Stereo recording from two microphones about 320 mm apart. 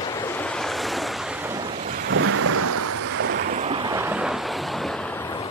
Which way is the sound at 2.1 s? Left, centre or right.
Right.